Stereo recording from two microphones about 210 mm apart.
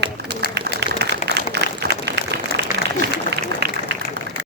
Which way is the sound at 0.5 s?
50° right (ahead or behind).